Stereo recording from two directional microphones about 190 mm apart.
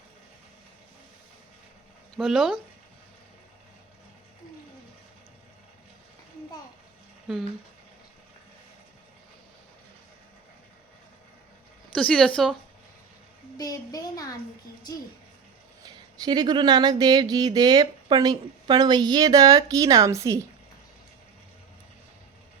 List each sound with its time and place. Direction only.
2.1 s speech: centre (ahead or behind)
11.9 s speech: 5° left (ahead or behind)
13.6 s speech: 20° left (ahead or behind)
15.8 s a sound: 20° right (ahead or behind)